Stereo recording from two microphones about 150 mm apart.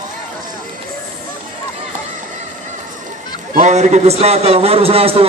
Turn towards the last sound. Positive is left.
turn(degrees=-40)  # may be behind; listen again after turning